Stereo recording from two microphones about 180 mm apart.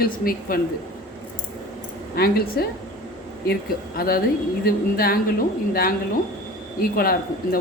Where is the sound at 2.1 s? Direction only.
60° left (ahead or behind).